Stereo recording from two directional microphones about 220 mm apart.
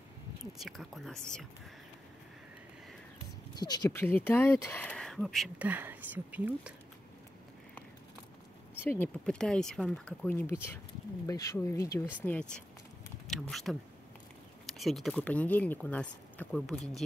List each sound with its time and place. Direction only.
0.6 s speech: centre (ahead or behind)
3.5 s speech: 20° left (ahead or behind); by 6.7 s 5° right (ahead or behind)
8.8 s speech: 10° left (ahead or behind)